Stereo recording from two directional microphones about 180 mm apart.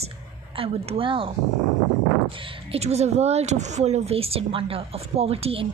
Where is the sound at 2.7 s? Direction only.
35° right (ahead or behind).